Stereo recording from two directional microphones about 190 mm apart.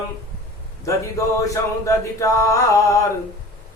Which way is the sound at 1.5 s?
15° left (ahead or behind).